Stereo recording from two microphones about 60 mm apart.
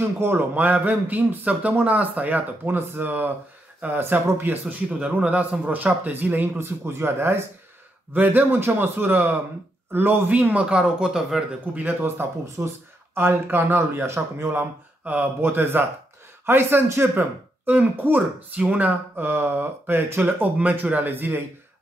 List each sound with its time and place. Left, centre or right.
0.0 s speech: right
4.8 s speech: centre; by 7.4 s right
8.1 s speech: right; by 11.4 s centre
11.7 s speech: right
14.6 s speech: right